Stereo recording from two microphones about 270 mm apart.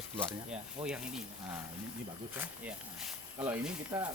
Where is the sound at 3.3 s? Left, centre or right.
Centre.